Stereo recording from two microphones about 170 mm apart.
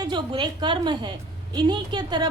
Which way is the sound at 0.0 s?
25° right (ahead or behind).